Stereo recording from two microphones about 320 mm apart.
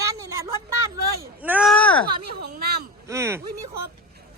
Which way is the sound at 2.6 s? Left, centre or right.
Right.